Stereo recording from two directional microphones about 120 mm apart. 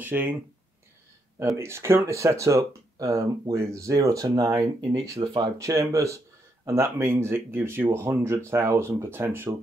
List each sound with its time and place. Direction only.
0.0 s speech: 15° right (ahead or behind)
1.6 s speech: 20° right (ahead or behind)